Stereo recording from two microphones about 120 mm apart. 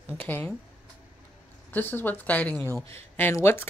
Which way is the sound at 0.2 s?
15° left (ahead or behind).